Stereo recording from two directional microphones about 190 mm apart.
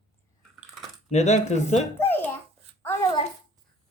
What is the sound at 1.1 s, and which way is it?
Speech, 35° left (ahead or behind).